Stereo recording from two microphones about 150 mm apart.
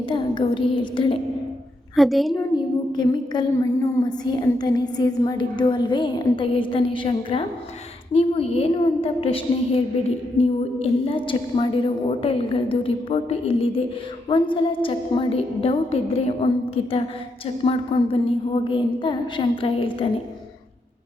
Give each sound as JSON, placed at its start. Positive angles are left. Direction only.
{"t": 0.1, "sound": "a woman's voice", "side_deg": 35}
{"t": 2.0, "sound": "a woman's voice", "side_deg": 0}
{"t": 2.9, "sound": "a woman's voice", "side_deg": 30}